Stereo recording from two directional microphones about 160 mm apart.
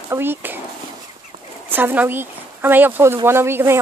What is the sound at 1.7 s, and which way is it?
Speech, 10° right (ahead or behind).